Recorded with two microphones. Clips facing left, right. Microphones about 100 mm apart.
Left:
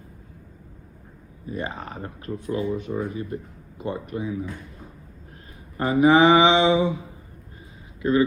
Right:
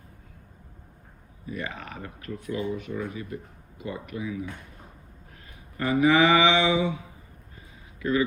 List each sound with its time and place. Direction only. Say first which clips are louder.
1.5 s speech: left 4 dB; 30° left (ahead or behind)
5.7 s speech: left 4 dB; 30° left (ahead or behind)
8.0 s speech: left 4 dB; 25° left (ahead or behind)